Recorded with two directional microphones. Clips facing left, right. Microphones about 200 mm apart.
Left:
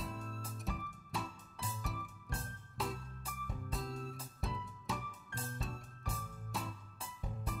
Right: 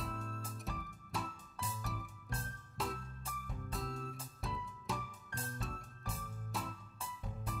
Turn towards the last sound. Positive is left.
turn(degrees=0)  # may be behind; listen again after turning